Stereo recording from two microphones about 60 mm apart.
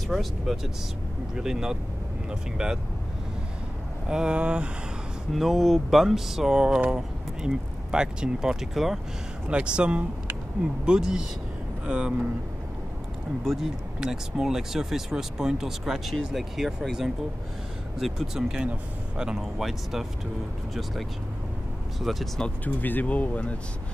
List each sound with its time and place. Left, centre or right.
0.1 s speech: centre
4.1 s speech: centre
5.3 s speech: centre
9.5 s speech: centre
13.4 s speech: centre
22.1 s speech: centre
22.7 s speech: left